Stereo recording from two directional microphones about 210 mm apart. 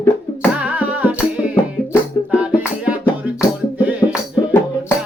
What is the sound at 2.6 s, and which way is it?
Music, 5° right (ahead or behind).